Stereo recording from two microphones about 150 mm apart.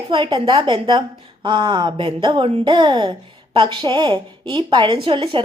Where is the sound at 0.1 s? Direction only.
35° right (ahead or behind).